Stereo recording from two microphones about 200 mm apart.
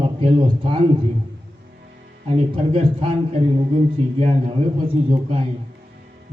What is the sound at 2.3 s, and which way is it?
A man's voice, 30° right (ahead or behind).